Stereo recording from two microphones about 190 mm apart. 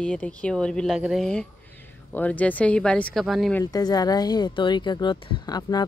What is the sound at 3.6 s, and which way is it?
Speech, 20° left (ahead or behind).